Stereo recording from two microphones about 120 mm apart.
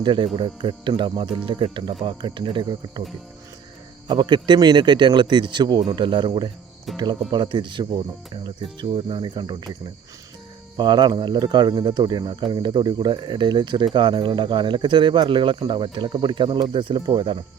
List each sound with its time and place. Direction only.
0.0 s speech: 40° right (ahead or behind)
4.1 s speech: 35° right (ahead or behind)
10.8 s speech: 35° right (ahead or behind)